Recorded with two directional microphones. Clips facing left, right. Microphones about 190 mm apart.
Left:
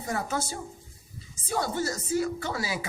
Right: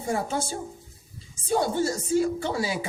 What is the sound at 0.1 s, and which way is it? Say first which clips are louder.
Speech: right 3 dB; 30° right (ahead or behind).